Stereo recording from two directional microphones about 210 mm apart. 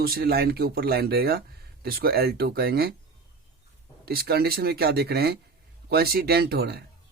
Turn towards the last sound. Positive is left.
turn(degrees=-50)  # may be behind; listen again after turning